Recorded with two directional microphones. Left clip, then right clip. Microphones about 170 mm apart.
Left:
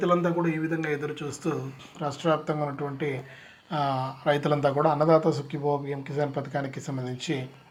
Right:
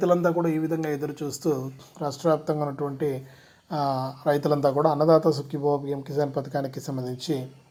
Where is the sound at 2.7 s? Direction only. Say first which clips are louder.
Right 3 dB; 5° right (ahead or behind).